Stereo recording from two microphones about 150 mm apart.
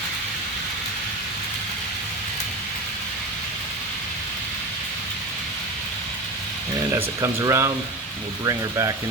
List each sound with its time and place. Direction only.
6.9 s speech: 20° right (ahead or behind)